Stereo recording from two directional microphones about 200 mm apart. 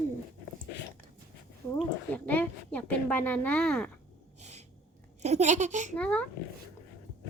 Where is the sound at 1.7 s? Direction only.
10° left (ahead or behind).